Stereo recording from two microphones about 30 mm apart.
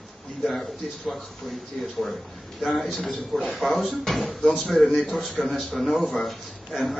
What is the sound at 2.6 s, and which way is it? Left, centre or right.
A man's voice, centre.